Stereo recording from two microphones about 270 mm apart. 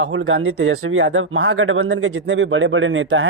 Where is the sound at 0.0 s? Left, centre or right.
Right.